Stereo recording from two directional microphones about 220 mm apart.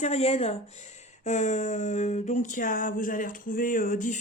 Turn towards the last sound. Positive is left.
turn(degrees=35)  # may be behind; listen again after turning